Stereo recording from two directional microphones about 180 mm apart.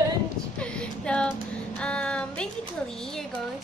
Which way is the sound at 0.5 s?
5° left (ahead or behind).